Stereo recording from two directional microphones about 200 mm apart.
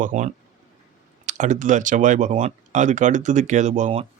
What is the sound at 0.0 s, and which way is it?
Speech, 40° right (ahead or behind).